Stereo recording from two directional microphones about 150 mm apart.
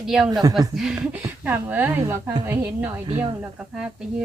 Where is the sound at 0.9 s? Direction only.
15° right (ahead or behind).